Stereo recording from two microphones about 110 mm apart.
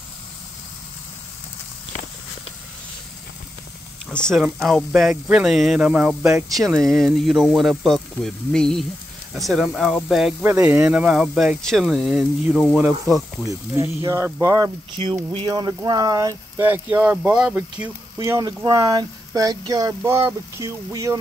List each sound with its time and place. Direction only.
4.4 s speech: centre (ahead or behind)
6.5 s speech: centre (ahead or behind)
10.4 s speech: 15° right (ahead or behind)
12.5 s speech: 5° left (ahead or behind)
13.5 s speech: 30° right (ahead or behind)
15.3 s speech: 40° right (ahead or behind)
16.5 s speech: 20° right (ahead or behind)
18.4 s speech: 35° right (ahead or behind)
20.0 s speech: 25° right (ahead or behind)